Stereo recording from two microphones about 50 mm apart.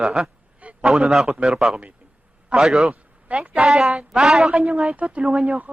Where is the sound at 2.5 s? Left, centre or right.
Centre.